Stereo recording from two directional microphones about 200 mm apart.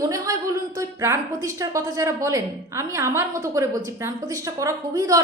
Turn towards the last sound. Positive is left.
turn(degrees=-20)  # may be behind; listen again after turning